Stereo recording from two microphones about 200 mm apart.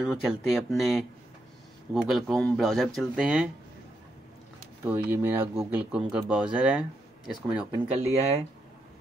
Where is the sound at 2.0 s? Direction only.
Centre (ahead or behind).